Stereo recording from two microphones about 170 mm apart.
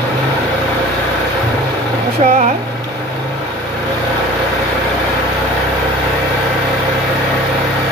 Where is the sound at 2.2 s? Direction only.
40° right (ahead or behind).